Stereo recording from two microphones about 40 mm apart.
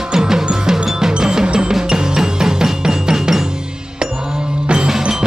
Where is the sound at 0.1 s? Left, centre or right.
Centre.